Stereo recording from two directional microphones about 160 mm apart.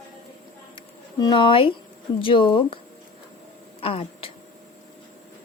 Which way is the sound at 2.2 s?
30° left (ahead or behind).